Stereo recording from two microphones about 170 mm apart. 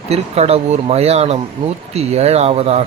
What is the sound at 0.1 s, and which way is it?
Speech, 40° right (ahead or behind).